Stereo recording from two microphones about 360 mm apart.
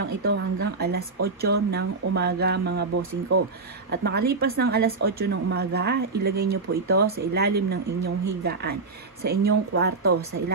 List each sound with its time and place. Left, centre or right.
0.3 s speech: right